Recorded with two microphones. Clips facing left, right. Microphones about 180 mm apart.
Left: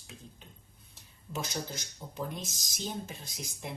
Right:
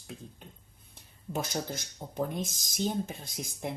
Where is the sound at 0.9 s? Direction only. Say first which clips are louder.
Right 5 dB; 50° right (ahead or behind).